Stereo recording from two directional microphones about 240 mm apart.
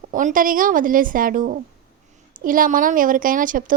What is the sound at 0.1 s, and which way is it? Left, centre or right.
A woman's voice, right.